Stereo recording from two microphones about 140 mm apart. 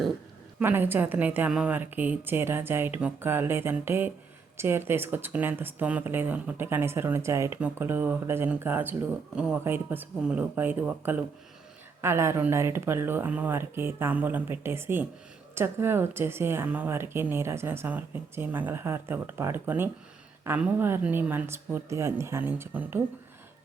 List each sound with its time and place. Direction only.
0.6 s speech: 15° right (ahead or behind)